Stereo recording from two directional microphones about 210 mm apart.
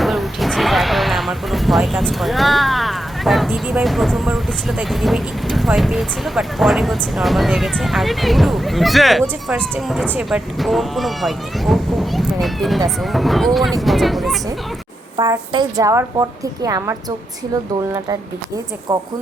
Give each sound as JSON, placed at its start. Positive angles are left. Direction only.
{"t": 0.0, "sound": "speech", "side_deg": 0}
{"t": 15.1, "sound": "a woman's voice", "side_deg": -20}